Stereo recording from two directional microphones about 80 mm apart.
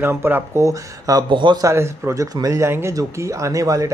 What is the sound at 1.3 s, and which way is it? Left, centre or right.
Speech, right.